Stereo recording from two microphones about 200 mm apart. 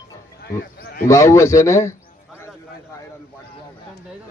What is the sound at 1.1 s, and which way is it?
Speech, 15° left (ahead or behind).